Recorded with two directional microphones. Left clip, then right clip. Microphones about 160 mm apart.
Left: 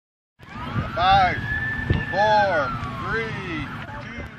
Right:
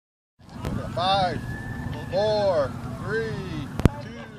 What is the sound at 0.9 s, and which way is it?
Vehicle, 25° right (ahead or behind).